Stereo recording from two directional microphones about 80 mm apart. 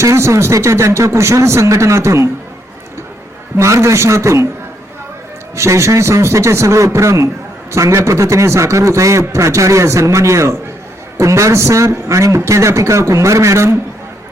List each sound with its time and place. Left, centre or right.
0.0 s a man's voice: right
3.6 s a man's voice: right
5.5 s a man's voice: right